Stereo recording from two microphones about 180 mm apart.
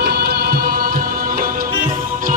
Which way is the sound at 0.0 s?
65° right (ahead or behind).